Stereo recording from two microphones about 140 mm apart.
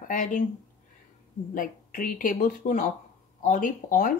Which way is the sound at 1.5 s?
75° left (ahead or behind).